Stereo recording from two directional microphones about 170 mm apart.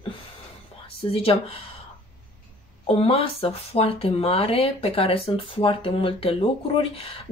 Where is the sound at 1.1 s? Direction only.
35° left (ahead or behind).